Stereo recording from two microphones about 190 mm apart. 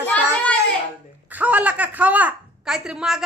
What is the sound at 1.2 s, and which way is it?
A woman's voice, 10° right (ahead or behind).